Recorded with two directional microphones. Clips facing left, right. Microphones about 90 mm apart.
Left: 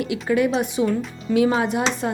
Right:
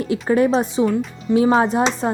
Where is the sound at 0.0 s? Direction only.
35° right (ahead or behind).